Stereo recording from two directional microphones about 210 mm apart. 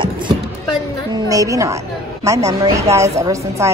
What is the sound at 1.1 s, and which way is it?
A woman's voice, 15° right (ahead or behind).